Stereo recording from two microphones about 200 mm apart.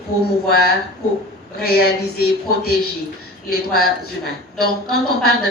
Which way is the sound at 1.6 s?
50° left (ahead or behind).